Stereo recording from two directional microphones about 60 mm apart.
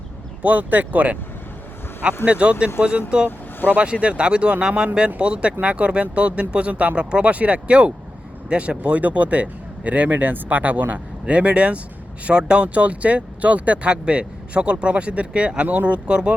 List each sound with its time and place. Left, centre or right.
0.4 s speech: right
2.2 s speech: centre
3.2 s vehicle: left
3.8 s speech: centre